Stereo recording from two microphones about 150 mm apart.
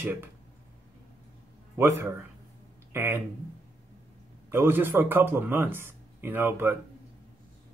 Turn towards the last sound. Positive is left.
turn(degrees=-15)  # may be behind; listen again after turning